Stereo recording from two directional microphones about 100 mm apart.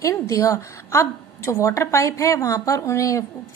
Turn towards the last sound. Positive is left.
turn(degrees=30)  # may be behind; listen again after turning